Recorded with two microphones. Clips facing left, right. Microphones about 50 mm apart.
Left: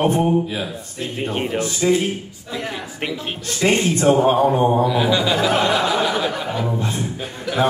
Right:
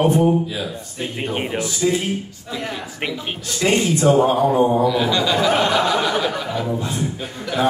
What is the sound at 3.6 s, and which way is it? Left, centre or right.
Speech, left.